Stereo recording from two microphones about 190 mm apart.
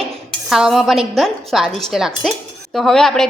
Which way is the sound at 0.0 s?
Centre (ahead or behind).